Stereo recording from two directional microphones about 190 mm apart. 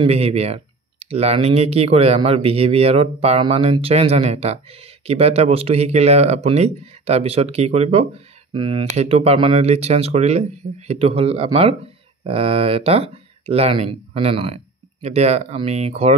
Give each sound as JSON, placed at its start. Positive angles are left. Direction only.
{"t": 0.0, "sound": "speech", "side_deg": -30}